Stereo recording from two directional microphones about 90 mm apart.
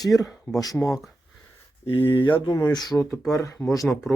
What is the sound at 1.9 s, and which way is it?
Speech, 75° left (ahead or behind).